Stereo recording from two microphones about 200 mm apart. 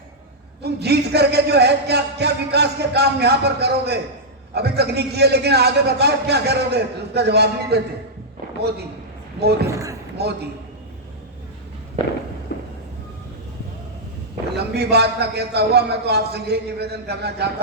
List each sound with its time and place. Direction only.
0.6 s speech: 55° right (ahead or behind)
9.6 s speech: 15° right (ahead or behind)
10.2 s speech: 55° right (ahead or behind)
12.5 s a sound: 55° left (ahead or behind)
14.5 s speech: 55° right (ahead or behind)